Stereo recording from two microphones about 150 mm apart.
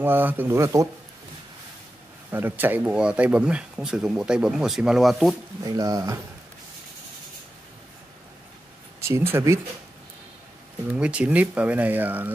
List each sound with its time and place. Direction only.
0.0 s speech: 15° right (ahead or behind)
2.3 s speech: 15° right (ahead or behind)
5.6 s speech: 25° right (ahead or behind)
9.0 s speech: 15° right (ahead or behind)
10.9 s speech: 10° right (ahead or behind)